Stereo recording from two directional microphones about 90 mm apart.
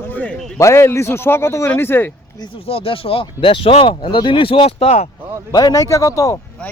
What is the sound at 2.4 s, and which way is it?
Speech, 80° left.